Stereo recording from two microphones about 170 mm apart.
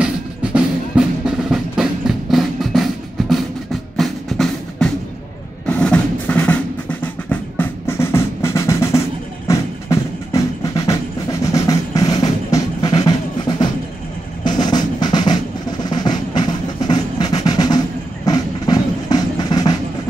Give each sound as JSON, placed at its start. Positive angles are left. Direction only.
{"t": 0.0, "sound": "music", "side_deg": -5}
{"t": 11.5, "sound": "drum", "side_deg": 20}
{"t": 13.5, "sound": "music", "side_deg": 25}
{"t": 14.6, "sound": "drum", "side_deg": 25}
{"t": 15.8, "sound": "music", "side_deg": 25}
{"t": 17.4, "sound": "percussion", "side_deg": 25}
{"t": 18.2, "sound": "music", "side_deg": 25}